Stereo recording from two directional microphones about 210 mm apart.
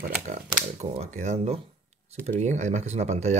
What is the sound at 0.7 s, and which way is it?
Speech, 30° right (ahead or behind).